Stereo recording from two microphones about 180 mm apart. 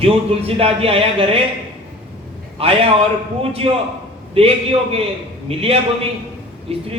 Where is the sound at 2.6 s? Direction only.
30° right (ahead or behind).